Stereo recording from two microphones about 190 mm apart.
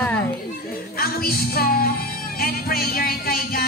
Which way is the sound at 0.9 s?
50° left (ahead or behind).